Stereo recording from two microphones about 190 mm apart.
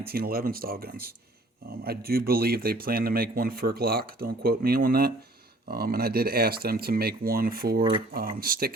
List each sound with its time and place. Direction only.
0.0 s speech: 55° right (ahead or behind)